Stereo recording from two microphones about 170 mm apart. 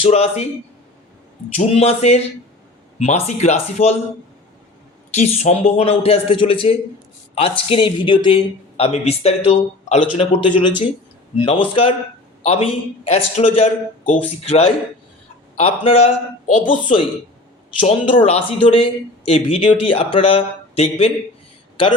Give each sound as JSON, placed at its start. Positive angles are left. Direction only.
{"t": 0.0, "sound": "a man's voice", "side_deg": 35}
{"t": 1.5, "sound": "a man's voice", "side_deg": 40}
{"t": 5.1, "sound": "a man's voice", "side_deg": 40}
{"t": 17.7, "sound": "speech", "side_deg": 45}
{"t": 18.2, "sound": "a man's voice", "side_deg": 30}